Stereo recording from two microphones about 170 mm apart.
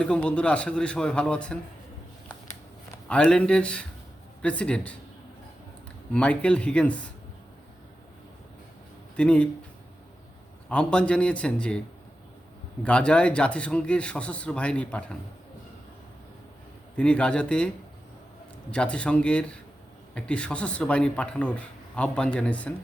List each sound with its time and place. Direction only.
0.0 s speech: 5° left (ahead or behind)
3.1 s speech: 5° left (ahead or behind)
6.1 s speech: 5° left (ahead or behind)
9.1 s speech: 5° left (ahead or behind)
10.7 s speech: 5° left (ahead or behind)
12.8 s speech: 5° left (ahead or behind)
17.0 s speech: 5° left (ahead or behind)
18.7 s speech: 5° left (ahead or behind)